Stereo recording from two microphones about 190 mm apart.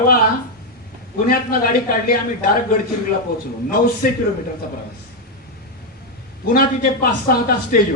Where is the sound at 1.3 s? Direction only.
50° left (ahead or behind).